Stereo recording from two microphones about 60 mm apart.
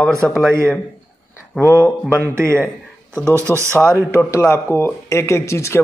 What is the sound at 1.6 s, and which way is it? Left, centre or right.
Speech, left.